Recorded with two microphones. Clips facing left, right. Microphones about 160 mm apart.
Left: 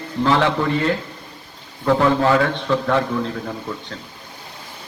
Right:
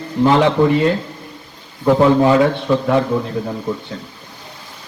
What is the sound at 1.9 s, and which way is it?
A man's voice, 15° right (ahead or behind).